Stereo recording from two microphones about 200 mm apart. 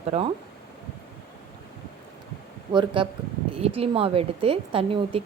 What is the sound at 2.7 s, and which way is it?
A woman's voice, 25° right (ahead or behind).